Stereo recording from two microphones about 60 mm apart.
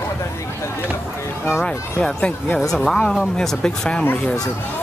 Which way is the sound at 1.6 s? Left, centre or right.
Centre.